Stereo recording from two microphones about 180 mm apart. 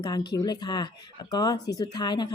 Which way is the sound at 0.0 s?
20° left (ahead or behind).